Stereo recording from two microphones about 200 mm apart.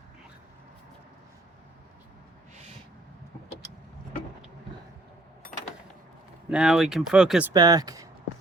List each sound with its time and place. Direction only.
6.5 s speech: 5° right (ahead or behind)
7.5 s speech: 20° right (ahead or behind)